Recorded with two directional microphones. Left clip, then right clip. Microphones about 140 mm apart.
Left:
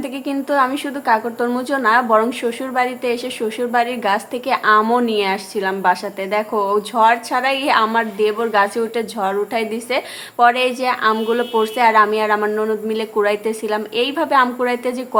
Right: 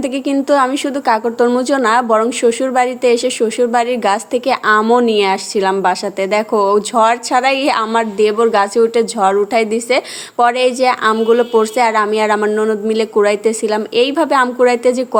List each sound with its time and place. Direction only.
0.0 s a woman's voice: 45° right (ahead or behind)
4.8 s speech: 25° right (ahead or behind)
5.0 s speech: 40° right (ahead or behind)